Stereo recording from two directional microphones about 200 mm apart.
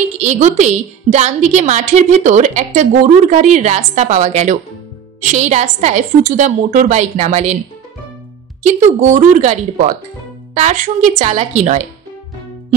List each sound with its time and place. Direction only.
0.2 s a woman's voice: 35° right (ahead or behind)
8.6 s a woman's voice: 35° right (ahead or behind)